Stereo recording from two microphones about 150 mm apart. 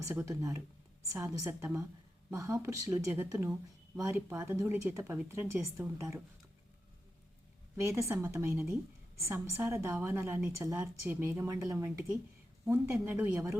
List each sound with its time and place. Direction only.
0.1 s a woman's voice: 15° right (ahead or behind)
7.8 s a woman's voice: 20° right (ahead or behind)